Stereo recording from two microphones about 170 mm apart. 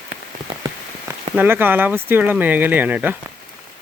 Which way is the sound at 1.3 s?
10° right (ahead or behind).